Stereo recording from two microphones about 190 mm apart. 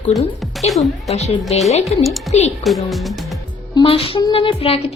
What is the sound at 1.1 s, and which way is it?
Speech, 35° left (ahead or behind).